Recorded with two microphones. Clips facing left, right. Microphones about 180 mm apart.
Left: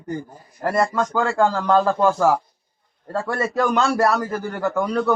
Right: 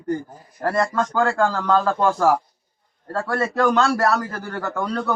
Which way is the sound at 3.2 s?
15° left (ahead or behind).